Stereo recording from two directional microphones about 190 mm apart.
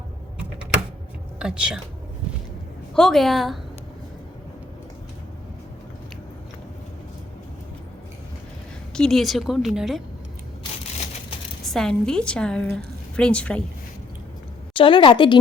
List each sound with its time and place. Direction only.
1.4 s speech: 5° right (ahead or behind)
2.9 s a woman's voice: 5° left (ahead or behind)
8.9 s a woman's voice: 5° left (ahead or behind)
11.6 s a woman's voice: centre (ahead or behind)
14.8 s a woman's voice: 25° left (ahead or behind)